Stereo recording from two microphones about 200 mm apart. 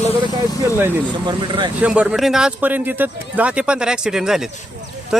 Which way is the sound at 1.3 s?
25° right (ahead or behind).